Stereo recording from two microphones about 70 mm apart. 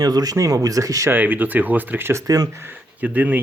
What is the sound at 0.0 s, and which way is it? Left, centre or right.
Speech, right.